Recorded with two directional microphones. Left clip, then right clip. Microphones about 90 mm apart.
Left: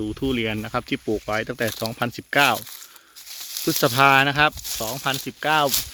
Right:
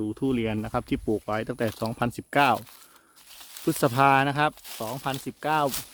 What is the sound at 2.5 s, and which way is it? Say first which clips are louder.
Speech: left 1 dB; centre (ahead or behind).